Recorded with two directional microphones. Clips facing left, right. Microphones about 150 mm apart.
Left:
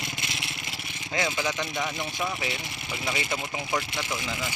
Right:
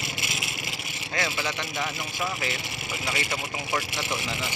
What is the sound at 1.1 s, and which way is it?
Speech, 15° left (ahead or behind).